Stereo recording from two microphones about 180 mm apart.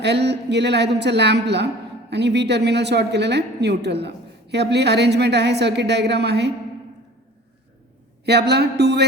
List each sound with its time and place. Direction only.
0.0 s a woman's voice: 70° right (ahead or behind)
8.2 s a man's voice: 65° right (ahead or behind)